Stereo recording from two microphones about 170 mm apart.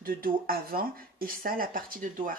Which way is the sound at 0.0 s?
60° right (ahead or behind).